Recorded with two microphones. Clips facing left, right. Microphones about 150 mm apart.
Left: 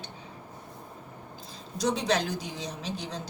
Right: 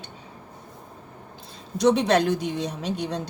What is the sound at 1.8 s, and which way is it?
Speech, 60° right (ahead or behind).